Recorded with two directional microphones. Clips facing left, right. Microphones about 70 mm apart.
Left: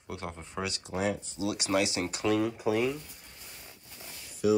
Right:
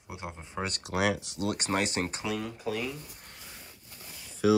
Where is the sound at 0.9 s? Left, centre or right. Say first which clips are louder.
Right 3 dB; right.